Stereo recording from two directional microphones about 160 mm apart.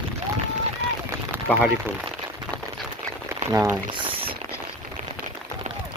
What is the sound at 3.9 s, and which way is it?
Boiling, 30° right (ahead or behind).